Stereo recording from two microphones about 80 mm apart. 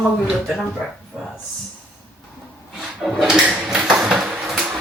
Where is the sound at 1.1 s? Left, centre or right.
Centre.